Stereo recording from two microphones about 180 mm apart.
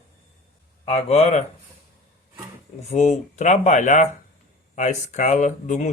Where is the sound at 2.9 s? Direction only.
40° left (ahead or behind).